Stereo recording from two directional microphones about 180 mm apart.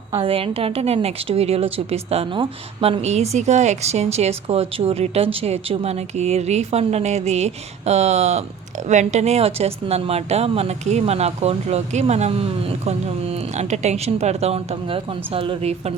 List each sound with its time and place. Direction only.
0.2 s a woman's voice: 30° right (ahead or behind)